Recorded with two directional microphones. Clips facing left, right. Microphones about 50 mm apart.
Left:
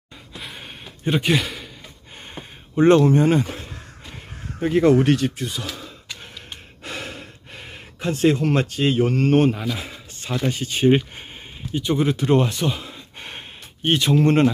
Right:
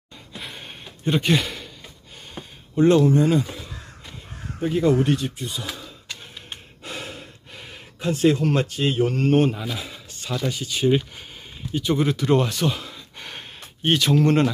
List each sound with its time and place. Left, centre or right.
0.3 s a sound: centre
1.0 s speech: centre
2.3 s a sound: left
3.0 s speech: left
5.0 s speech: left
6.8 s gasp: left
9.0 s speech: left
9.8 s speech: left
11.7 s speech: centre
12.2 s speech: centre
12.8 s a sound: left
14.1 s speech: left